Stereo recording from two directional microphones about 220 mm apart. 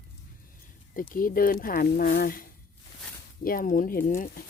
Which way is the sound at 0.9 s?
40° left (ahead or behind).